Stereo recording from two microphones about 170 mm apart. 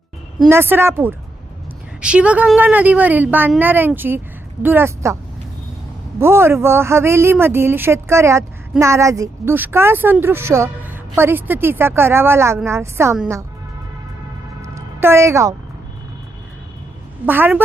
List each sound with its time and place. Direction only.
0.4 s speech: 15° right (ahead or behind)
6.1 s speech: 15° right (ahead or behind)
14.6 s music: 15° right (ahead or behind)
17.2 s speech: 10° right (ahead or behind)